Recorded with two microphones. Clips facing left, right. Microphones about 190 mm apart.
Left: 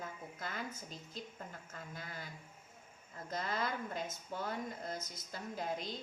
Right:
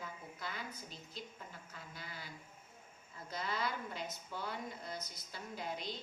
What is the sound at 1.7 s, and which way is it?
Speech, 50° left (ahead or behind).